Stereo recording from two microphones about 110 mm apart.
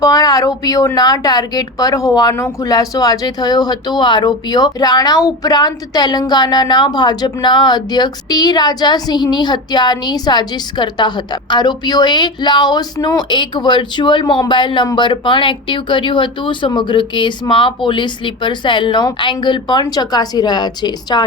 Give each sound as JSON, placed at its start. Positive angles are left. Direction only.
{"t": 0.0, "sound": "a woman's voice", "side_deg": 35}